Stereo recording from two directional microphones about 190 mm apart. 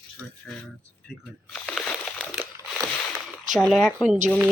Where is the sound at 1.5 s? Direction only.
Centre (ahead or behind).